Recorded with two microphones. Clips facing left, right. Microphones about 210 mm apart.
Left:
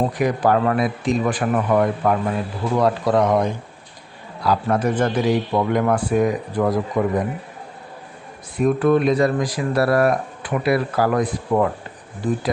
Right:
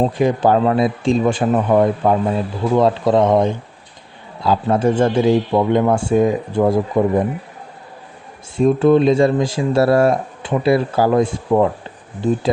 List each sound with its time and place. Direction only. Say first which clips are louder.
0.0 s speech: right 4 dB; 25° right (ahead or behind)
8.5 s speech: right 4 dB; 25° right (ahead or behind)